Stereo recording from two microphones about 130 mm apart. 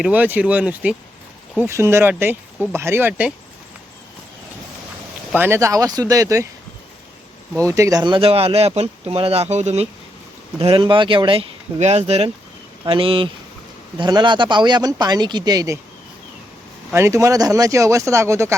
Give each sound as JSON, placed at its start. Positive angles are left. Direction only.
{"t": 0.0, "sound": "speech", "side_deg": -10}
{"t": 5.3, "sound": "speech", "side_deg": -15}
{"t": 7.5, "sound": "speech", "side_deg": -25}
{"t": 8.0, "sound": "speech", "side_deg": -40}
{"t": 10.6, "sound": "speech", "side_deg": -45}
{"t": 11.8, "sound": "speech", "side_deg": -60}
{"t": 12.8, "sound": "speech", "side_deg": -45}
{"t": 16.9, "sound": "speech", "side_deg": -20}